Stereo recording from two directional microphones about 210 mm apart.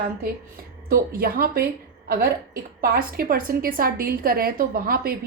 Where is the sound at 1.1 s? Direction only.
45° right (ahead or behind).